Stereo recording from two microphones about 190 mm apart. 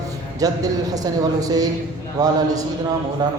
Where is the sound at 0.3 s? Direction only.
20° right (ahead or behind).